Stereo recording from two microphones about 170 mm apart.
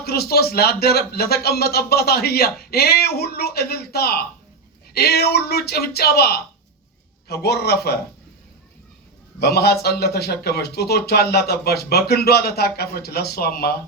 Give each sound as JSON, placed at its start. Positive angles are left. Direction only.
{"t": 0.0, "sound": "speech", "side_deg": 65}
{"t": 9.4, "sound": "speech", "side_deg": 70}